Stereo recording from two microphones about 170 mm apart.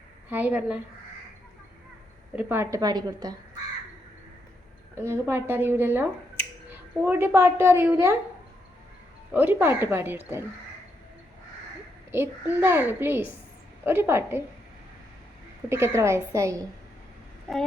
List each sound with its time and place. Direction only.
0.3 s a woman's voice: 10° right (ahead or behind)
2.3 s a woman's voice: 10° right (ahead or behind)
4.9 s a woman's voice: 15° right (ahead or behind)
9.3 s a woman's voice: 10° right (ahead or behind)
12.1 s a woman's voice: 10° right (ahead or behind)
15.7 s a woman's voice: 15° right (ahead or behind)